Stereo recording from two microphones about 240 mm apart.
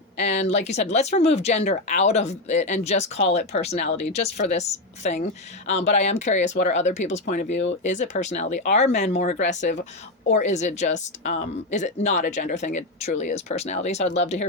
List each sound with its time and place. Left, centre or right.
0.2 s a woman's voice: left